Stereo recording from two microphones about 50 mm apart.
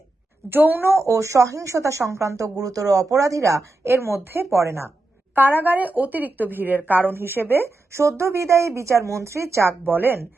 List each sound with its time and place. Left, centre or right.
0.5 s a woman's voice: right
0.9 s speech: right
3.8 s a woman's voice: right
4.4 s a woman's voice: right
5.3 s speech: right
7.5 s a woman's voice: right
9.6 s a woman's voice: right